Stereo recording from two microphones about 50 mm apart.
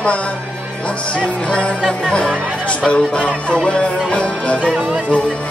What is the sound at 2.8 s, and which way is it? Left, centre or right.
Music, left.